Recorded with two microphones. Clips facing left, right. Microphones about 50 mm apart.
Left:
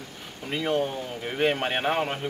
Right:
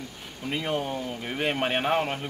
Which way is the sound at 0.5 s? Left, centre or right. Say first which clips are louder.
Left 2 dB; centre.